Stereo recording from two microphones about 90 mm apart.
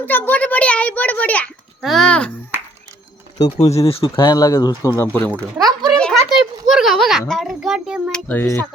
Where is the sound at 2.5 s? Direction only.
25° right (ahead or behind).